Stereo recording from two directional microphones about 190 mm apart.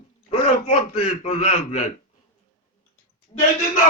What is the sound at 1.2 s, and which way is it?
Speech, 35° left (ahead or behind).